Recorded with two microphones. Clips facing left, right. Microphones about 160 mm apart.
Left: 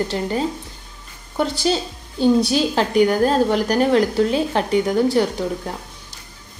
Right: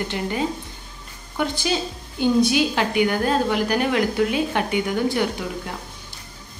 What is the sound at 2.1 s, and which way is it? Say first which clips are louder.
A woman's voice: left 2 dB; 35° left (ahead or behind).